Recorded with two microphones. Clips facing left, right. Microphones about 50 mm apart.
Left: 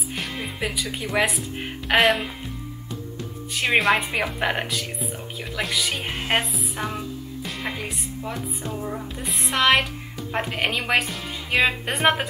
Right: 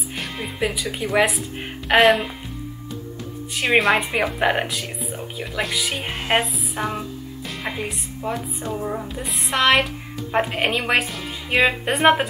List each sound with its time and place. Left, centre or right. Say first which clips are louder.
0.1 s music: even; centre
0.9 s a woman's voice: right 4 dB; centre
3.5 s a woman's voice: right 2 dB; centre
9.1 s a woman's voice: right 2 dB; centre